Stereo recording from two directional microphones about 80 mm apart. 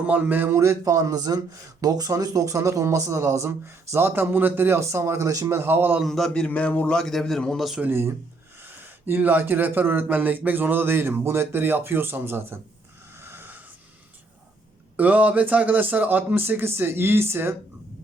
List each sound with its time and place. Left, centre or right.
0.1 s speech: right
5.5 s speech: right
6.1 s a man's voice: centre
7.8 s speech: right
13.1 s wheeze: right
14.9 s speech: centre